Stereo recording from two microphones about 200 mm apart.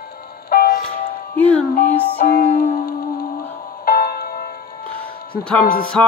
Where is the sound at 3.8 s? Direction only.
45° left (ahead or behind).